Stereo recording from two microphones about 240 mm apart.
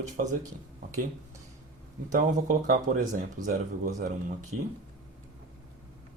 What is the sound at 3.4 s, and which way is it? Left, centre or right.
Speech, right.